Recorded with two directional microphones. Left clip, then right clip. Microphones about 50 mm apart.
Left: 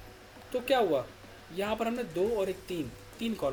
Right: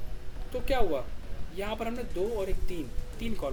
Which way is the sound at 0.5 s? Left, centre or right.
Centre.